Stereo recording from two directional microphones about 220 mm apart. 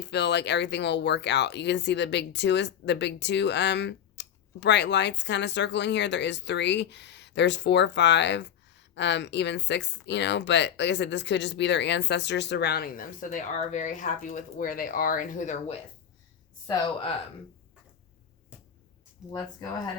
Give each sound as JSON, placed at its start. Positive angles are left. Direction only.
{"t": 0.0, "sound": "speech", "side_deg": 50}
{"t": 19.3, "sound": "speech", "side_deg": 15}